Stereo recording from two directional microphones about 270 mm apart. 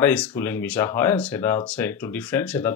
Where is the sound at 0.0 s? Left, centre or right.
Centre.